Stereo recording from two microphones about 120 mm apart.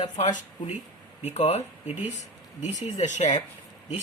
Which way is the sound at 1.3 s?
65° left (ahead or behind).